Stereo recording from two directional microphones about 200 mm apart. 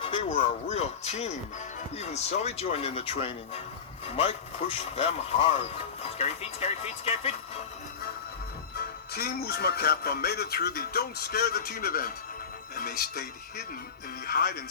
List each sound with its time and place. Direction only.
0.0 s speech: 25° left (ahead or behind)
9.1 s speech: 50° left (ahead or behind)